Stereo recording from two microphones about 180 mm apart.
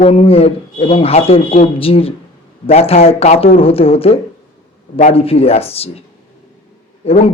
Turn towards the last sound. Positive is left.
turn(degrees=35)  # may be behind; listen again after turning